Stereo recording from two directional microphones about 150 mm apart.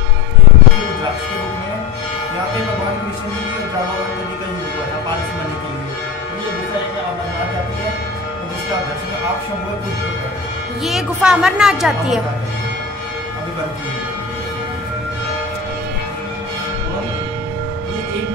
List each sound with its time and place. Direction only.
10.8 s speech: centre (ahead or behind)